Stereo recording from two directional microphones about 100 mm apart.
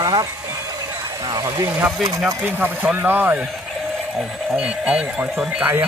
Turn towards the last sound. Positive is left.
turn(degrees=-15)  # may be behind; listen again after turning